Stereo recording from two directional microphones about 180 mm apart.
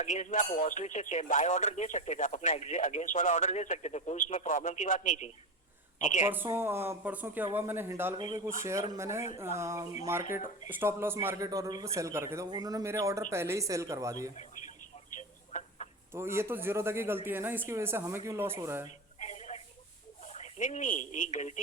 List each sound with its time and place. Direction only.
0.0 s a woman's voice: 40° left (ahead or behind)
6.2 s speech: 10° right (ahead or behind)
15.5 s chicken: 40° left (ahead or behind)
16.1 s speech: 15° right (ahead or behind)
19.2 s telephone: 40° left (ahead or behind)
20.2 s speech: 40° left (ahead or behind)